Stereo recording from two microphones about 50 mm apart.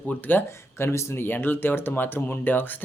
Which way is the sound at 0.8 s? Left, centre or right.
Left.